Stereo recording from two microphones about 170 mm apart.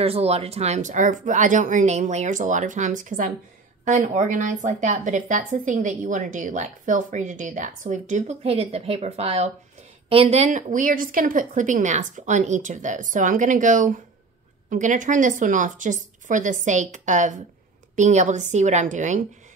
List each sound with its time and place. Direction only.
0.0 s a woman's voice: 35° right (ahead or behind)